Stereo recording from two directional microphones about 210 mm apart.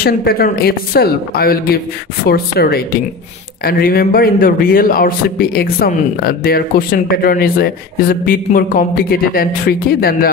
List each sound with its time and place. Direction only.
0.0 s a man's voice: 45° left (ahead or behind)